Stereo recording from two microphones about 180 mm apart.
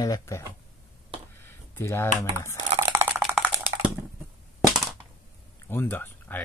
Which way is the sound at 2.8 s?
15° right (ahead or behind).